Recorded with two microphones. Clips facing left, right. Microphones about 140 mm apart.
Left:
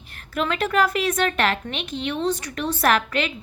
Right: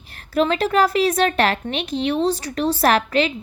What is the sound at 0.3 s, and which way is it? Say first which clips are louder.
A woman's voice: right 4 dB; 35° right (ahead or behind).